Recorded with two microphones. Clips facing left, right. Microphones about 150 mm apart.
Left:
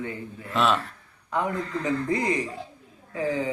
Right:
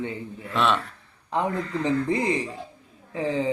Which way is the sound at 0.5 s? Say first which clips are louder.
Even; centre (ahead or behind).